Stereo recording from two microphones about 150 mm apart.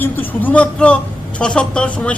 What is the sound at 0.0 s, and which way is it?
A man's voice, 10° left (ahead or behind).